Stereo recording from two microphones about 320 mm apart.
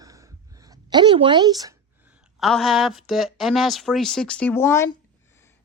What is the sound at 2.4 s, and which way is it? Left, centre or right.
Speech, centre.